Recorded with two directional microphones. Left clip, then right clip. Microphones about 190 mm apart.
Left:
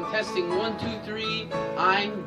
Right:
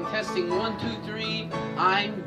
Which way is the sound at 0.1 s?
Centre (ahead or behind).